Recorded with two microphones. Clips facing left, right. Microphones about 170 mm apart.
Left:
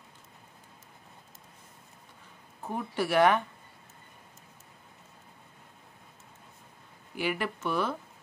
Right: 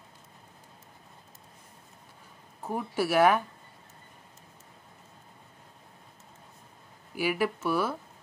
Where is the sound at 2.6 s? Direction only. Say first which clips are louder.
Right 2 dB; 5° right (ahead or behind).